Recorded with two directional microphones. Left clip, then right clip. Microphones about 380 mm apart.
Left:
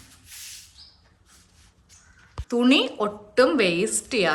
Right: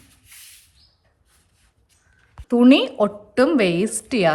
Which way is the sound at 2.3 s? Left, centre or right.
Centre.